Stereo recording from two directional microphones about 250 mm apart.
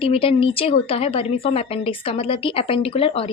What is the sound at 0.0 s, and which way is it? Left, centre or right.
A woman's voice, left.